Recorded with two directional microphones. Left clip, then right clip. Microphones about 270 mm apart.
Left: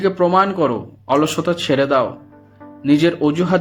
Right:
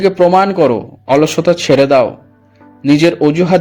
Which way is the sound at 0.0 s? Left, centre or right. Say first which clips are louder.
Right 6 dB; right.